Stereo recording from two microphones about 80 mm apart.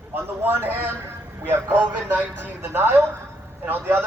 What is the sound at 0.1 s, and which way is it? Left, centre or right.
A man's voice, right.